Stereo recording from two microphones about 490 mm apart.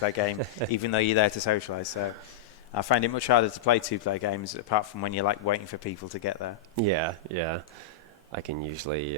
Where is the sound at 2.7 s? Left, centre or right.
Left.